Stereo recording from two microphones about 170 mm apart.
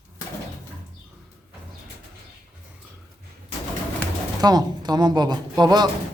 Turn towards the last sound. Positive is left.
turn(degrees=-25)  # may be behind; listen again after turning